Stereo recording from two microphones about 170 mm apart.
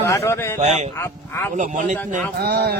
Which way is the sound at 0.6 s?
40° right (ahead or behind).